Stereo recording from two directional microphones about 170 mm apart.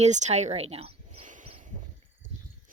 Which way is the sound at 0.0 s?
45° right (ahead or behind).